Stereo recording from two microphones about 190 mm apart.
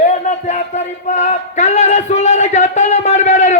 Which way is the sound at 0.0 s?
40° left (ahead or behind).